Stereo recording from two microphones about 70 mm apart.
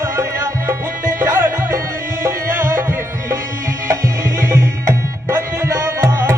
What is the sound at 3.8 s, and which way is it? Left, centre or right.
Music, right.